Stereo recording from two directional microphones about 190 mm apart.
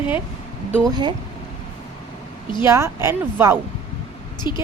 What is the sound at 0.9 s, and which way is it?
Speech, 25° right (ahead or behind).